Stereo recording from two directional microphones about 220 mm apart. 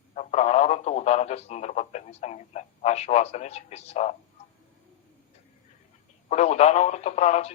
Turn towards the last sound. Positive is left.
turn(degrees=30)  # may be behind; listen again after turning